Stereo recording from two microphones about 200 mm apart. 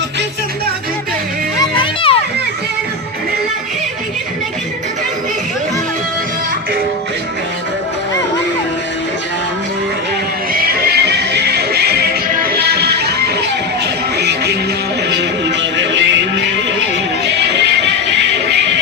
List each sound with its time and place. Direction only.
1.8 s music: 25° left (ahead or behind)
10.5 s music: 50° right (ahead or behind)
17.2 s music: 60° right (ahead or behind)